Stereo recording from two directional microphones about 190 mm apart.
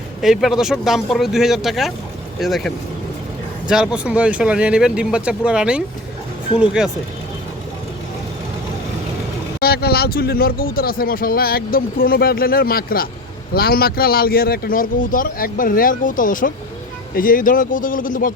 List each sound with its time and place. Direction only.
0.2 s speech: centre (ahead or behind)
9.6 s speech: 55° left (ahead or behind)